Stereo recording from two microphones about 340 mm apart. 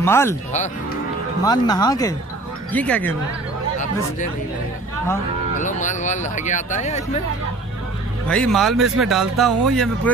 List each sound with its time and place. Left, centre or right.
0.0 s speech: centre
1.4 s speech: centre
5.6 s speech: left
8.3 s speech: centre